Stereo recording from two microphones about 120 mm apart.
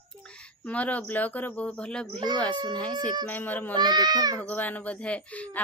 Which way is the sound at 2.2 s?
35° right (ahead or behind).